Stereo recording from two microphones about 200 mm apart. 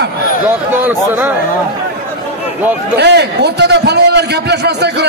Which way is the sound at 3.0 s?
55° right (ahead or behind).